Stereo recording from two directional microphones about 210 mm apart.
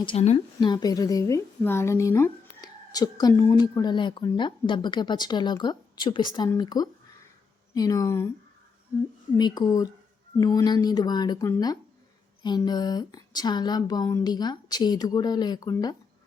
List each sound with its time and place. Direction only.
0.0 s a woman's voice: 30° left (ahead or behind)
9.4 s a woman's voice: 20° left (ahead or behind)